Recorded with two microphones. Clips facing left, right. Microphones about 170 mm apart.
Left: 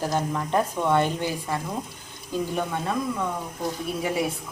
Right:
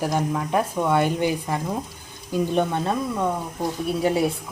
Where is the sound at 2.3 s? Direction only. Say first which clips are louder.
Right 5 dB; 25° right (ahead or behind).